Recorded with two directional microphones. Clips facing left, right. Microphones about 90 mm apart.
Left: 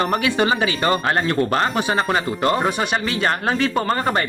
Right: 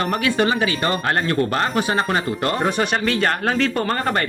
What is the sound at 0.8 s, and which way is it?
Speech, 30° left (ahead or behind).